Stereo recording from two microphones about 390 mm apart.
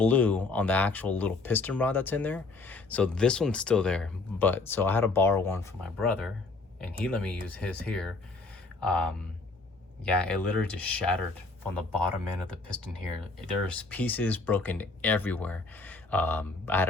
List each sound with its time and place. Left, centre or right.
0.0 s speech: centre
13.7 s speech: centre